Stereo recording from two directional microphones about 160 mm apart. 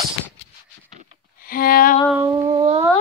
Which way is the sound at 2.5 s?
40° right (ahead or behind).